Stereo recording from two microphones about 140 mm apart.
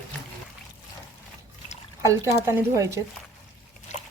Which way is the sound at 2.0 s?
20° right (ahead or behind).